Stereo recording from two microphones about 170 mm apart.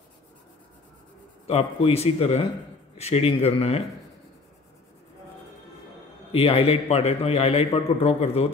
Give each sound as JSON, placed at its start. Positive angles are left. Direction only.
{"t": 1.5, "sound": "a man's voice", "side_deg": 35}
{"t": 6.3, "sound": "a man's voice", "side_deg": 35}